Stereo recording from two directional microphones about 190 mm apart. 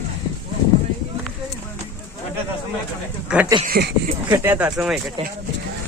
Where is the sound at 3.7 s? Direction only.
55° right (ahead or behind).